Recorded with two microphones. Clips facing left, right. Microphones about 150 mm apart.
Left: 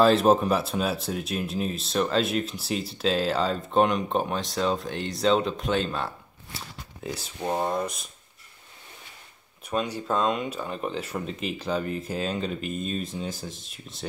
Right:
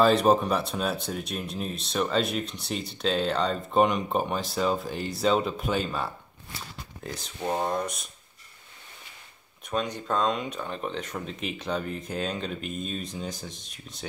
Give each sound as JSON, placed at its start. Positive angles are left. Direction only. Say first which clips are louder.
{"t": 0.0, "sound": "speech", "louder": "left 1 dB", "side_deg": 0}
{"t": 9.7, "sound": "speech", "louder": "left 1 dB", "side_deg": 5}